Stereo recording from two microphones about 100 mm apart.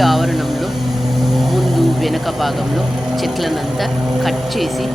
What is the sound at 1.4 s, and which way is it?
Vehicle, centre (ahead or behind).